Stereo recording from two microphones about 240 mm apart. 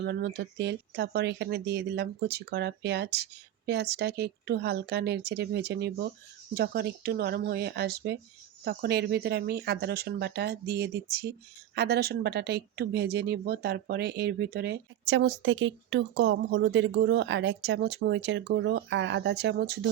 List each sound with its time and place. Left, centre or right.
0.0 s speech: right